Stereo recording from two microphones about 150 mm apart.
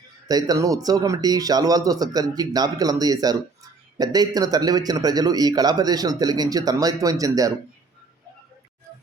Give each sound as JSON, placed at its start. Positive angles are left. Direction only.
{"t": 0.3, "sound": "a man's voice", "side_deg": -25}